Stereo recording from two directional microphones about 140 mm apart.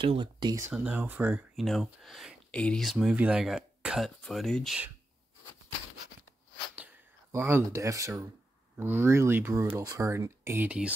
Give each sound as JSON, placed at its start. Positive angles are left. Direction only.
{"t": 0.0, "sound": "speech", "side_deg": -35}
{"t": 0.7, "sound": "speech", "side_deg": -10}
{"t": 1.6, "sound": "speech", "side_deg": 0}
{"t": 7.3, "sound": "speech", "side_deg": -15}